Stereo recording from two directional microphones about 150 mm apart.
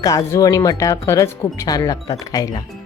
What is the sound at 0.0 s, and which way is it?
Speech, 25° left (ahead or behind).